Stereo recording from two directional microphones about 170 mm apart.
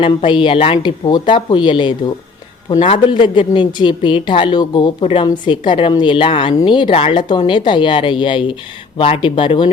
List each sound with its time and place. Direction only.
0.0 s speech: 30° left (ahead or behind)